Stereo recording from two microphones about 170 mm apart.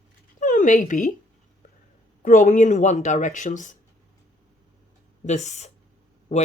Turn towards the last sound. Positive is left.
turn(degrees=45)  # may be behind; listen again after turning